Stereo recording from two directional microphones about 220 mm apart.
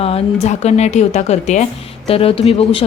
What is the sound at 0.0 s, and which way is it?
Speech, 30° left (ahead or behind).